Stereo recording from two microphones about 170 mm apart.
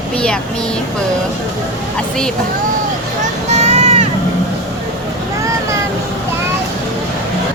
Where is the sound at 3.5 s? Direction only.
40° right (ahead or behind).